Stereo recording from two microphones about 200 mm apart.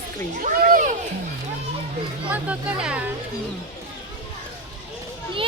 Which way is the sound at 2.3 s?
5° right (ahead or behind).